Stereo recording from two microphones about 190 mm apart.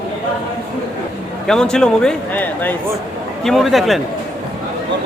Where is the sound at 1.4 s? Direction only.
5° left (ahead or behind).